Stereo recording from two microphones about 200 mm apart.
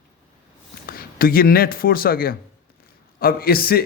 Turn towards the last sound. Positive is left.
turn(degrees=50)  # may be behind; listen again after turning